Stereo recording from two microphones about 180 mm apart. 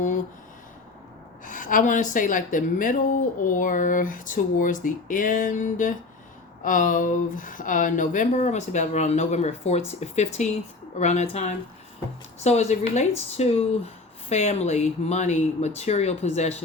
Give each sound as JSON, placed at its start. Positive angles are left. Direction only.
{"t": 1.5, "sound": "speech", "side_deg": 50}